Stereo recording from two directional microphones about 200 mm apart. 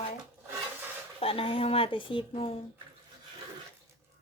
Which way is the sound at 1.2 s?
30° left (ahead or behind).